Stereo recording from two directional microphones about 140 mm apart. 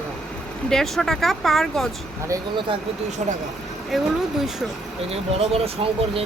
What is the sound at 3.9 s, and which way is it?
Speech, centre (ahead or behind).